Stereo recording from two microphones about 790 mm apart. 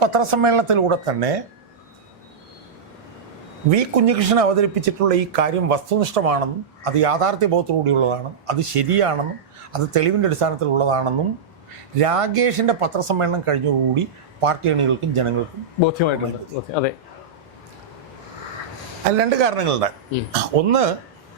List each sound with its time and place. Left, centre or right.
0.0 s speech: right
3.7 s speech: right
15.9 s a man's voice: left
19.2 s speech: right